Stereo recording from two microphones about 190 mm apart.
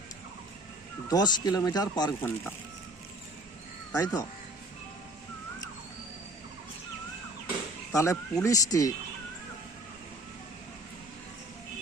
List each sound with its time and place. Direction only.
1.0 s speech: 20° left (ahead or behind)
3.9 s speech: 20° left (ahead or behind)
7.9 s speech: 15° left (ahead or behind)